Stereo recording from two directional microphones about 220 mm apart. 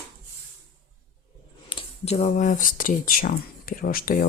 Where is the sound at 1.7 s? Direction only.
30° left (ahead or behind).